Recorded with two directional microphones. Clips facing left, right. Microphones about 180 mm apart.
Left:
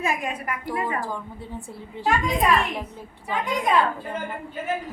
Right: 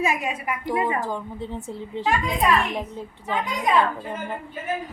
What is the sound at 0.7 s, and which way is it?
Speech, 20° right (ahead or behind).